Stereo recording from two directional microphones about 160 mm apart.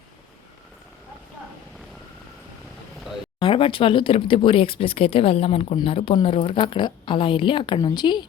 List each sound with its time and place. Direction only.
3.4 s speech: 30° left (ahead or behind)